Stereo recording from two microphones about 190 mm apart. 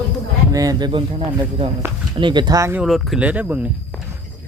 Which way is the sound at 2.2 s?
25° right (ahead or behind).